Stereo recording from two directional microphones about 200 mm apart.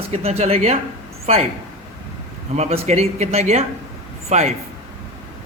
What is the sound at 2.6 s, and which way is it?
Speech, 30° right (ahead or behind).